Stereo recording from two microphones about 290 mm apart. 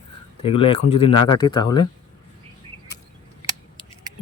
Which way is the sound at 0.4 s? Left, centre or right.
Centre.